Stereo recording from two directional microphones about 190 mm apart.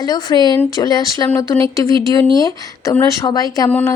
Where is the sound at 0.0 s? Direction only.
20° left (ahead or behind).